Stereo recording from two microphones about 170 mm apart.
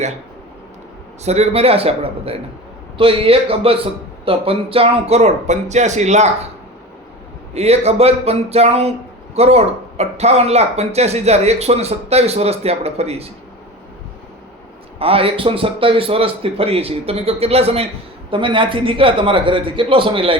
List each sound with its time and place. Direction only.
1.2 s speech: 40° right (ahead or behind)
7.5 s speech: 40° right (ahead or behind)
14.9 s speech: 35° right (ahead or behind)